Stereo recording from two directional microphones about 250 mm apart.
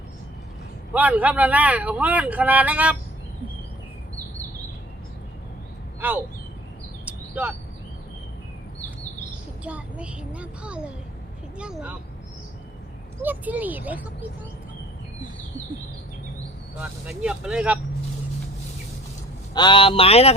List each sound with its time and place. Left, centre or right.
0.9 s speech: centre
6.0 s speech: centre
7.0 s bird: centre
9.6 s speech: centre
13.2 s speech: centre
16.8 s speech: centre
19.5 s speech: centre